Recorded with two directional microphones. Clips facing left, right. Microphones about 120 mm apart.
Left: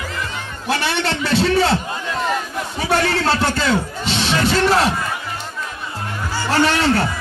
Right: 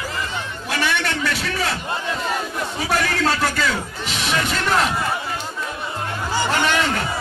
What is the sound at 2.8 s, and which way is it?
Music, 30° left (ahead or behind).